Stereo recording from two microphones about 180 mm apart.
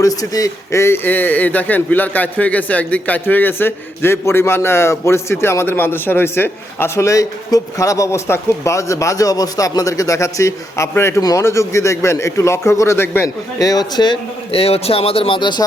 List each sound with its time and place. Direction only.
0.0 s speech: 20° left (ahead or behind)